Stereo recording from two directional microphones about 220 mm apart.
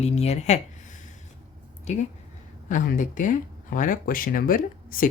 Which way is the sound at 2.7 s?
35° left (ahead or behind).